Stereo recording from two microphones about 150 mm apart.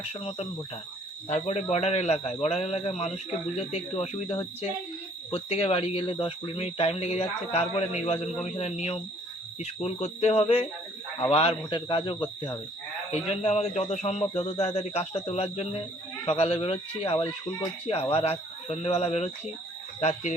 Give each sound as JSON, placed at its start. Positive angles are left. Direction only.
{"t": 0.1, "sound": "a man's voice", "side_deg": 40}
{"t": 13.2, "sound": "a man's voice", "side_deg": 40}